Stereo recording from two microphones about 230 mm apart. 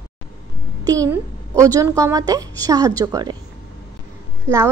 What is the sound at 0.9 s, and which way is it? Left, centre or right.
A woman's voice, centre.